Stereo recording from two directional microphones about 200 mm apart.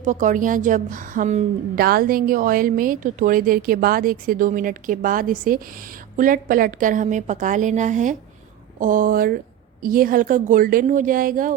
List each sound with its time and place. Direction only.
0.0 s a woman's voice: 40° right (ahead or behind)
1.8 s a woman's voice: 50° right (ahead or behind)